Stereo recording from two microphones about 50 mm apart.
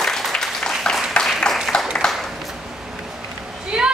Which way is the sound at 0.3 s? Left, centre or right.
Centre.